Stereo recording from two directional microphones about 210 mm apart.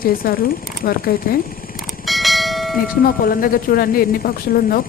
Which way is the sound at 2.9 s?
45° left (ahead or behind).